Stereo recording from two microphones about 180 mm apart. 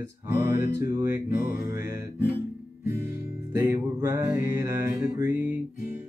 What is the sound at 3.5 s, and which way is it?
Music, 15° right (ahead or behind).